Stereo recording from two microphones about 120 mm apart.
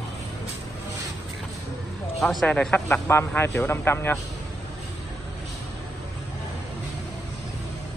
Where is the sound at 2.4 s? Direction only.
10° left (ahead or behind).